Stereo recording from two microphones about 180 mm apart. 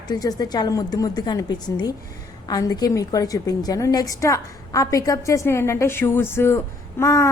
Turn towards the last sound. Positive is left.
turn(degrees=20)  # may be behind; listen again after turning